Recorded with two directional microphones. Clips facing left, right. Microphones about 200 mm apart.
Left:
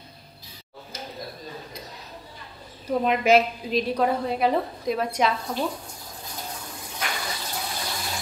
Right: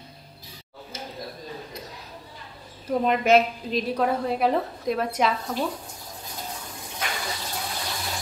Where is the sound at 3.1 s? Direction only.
Centre (ahead or behind).